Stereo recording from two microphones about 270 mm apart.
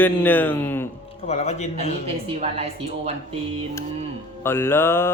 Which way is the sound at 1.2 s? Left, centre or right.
Left.